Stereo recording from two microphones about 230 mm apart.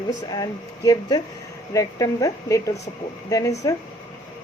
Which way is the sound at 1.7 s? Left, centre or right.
Centre.